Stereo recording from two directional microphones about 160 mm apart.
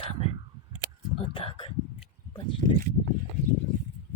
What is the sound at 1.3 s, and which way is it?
Speech, 35° left (ahead or behind).